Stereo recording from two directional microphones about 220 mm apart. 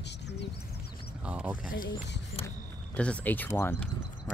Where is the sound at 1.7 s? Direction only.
40° left (ahead or behind).